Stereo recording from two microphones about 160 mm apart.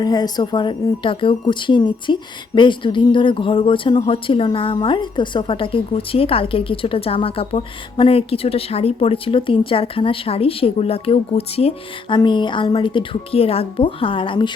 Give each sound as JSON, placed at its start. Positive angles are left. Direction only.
{"t": 0.0, "sound": "a woman's voice", "side_deg": 25}